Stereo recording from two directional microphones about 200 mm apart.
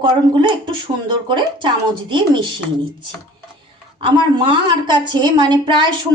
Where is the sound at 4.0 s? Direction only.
20° right (ahead or behind).